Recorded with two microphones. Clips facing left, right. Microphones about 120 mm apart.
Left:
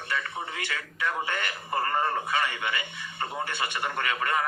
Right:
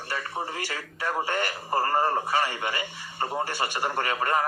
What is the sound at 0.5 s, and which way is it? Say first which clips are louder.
A man's voice: right 1 dB; 35° right (ahead or behind).